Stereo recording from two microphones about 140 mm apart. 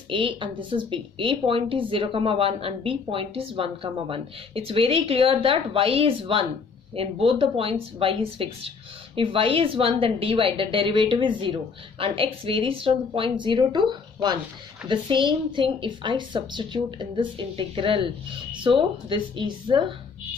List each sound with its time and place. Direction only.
0.1 s speech: 35° right (ahead or behind)